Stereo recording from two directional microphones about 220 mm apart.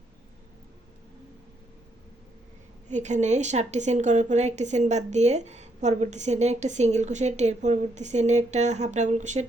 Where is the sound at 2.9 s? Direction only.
35° right (ahead or behind).